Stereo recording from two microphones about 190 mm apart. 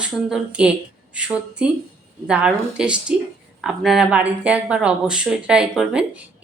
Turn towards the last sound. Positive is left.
turn(degrees=-5)  # may be behind; listen again after turning